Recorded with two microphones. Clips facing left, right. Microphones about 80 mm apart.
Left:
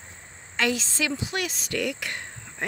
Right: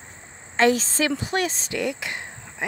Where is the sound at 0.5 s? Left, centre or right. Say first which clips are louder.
Right 7 dB; right.